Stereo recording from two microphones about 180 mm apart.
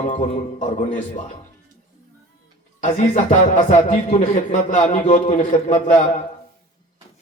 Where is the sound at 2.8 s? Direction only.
45° left (ahead or behind).